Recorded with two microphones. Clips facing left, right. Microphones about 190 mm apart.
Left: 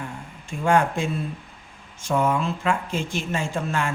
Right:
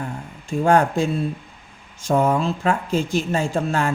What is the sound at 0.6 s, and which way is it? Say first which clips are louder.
Speech: right 4 dB; 35° right (ahead or behind).